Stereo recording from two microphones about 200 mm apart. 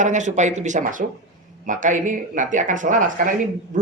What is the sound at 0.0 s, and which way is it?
Speech, 35° right (ahead or behind).